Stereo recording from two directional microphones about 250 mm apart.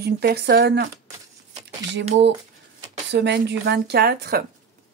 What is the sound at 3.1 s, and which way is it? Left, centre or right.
Speech, right.